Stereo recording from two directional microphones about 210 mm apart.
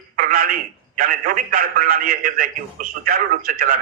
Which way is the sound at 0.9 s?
40° right (ahead or behind).